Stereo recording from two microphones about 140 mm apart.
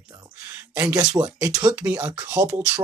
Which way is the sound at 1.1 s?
25° right (ahead or behind).